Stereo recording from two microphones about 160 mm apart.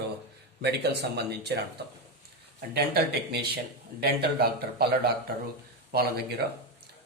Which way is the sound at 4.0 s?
80° right.